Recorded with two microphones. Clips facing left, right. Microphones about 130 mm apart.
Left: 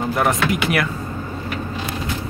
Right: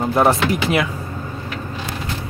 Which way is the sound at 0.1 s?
30° right (ahead or behind).